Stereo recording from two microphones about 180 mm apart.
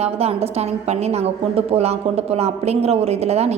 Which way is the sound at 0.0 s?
35° right (ahead or behind).